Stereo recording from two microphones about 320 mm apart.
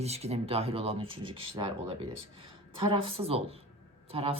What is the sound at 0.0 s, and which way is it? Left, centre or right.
Speech, centre.